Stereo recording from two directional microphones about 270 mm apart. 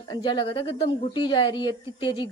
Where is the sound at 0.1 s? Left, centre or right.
Centre.